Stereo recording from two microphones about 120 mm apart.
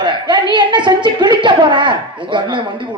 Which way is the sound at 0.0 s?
40° right (ahead or behind).